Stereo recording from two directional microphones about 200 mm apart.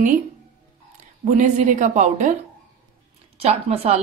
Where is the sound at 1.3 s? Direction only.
40° right (ahead or behind).